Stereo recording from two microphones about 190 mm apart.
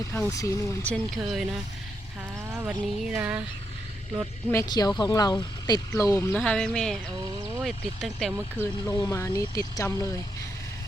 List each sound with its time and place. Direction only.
0.1 s speech: 15° left (ahead or behind); by 1.5 s centre (ahead or behind)
2.6 s speech: 5° right (ahead or behind)
4.5 s speech: 20° left (ahead or behind); by 8.3 s centre (ahead or behind)
8.9 s speech: 15° left (ahead or behind)